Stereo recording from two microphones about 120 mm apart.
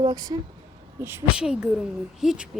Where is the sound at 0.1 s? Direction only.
35° right (ahead or behind).